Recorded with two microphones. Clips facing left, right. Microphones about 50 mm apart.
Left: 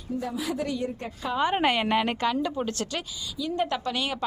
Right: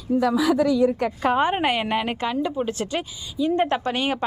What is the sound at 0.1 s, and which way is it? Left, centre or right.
A woman's voice, right.